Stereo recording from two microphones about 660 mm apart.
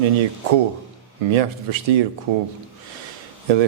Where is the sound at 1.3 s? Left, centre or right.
Right.